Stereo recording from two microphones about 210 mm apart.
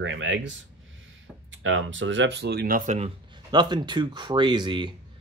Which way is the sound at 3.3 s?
20° right (ahead or behind).